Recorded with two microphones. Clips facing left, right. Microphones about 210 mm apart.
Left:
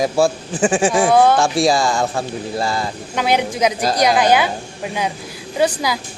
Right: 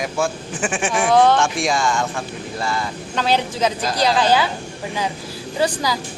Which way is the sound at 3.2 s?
15° left (ahead or behind).